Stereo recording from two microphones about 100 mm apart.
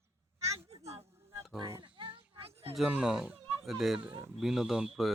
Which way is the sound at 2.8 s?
10° right (ahead or behind).